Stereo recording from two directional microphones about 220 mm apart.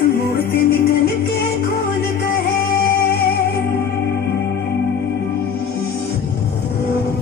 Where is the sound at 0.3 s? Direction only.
45° left (ahead or behind).